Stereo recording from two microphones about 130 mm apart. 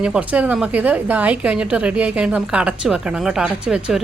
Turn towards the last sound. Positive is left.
turn(degrees=-5)  # may be behind; listen again after turning